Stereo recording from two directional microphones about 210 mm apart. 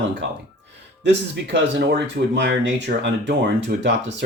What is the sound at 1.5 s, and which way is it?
Speech, 55° right (ahead or behind).